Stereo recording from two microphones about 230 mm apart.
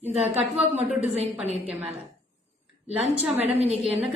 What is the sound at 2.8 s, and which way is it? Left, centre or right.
Speech, right.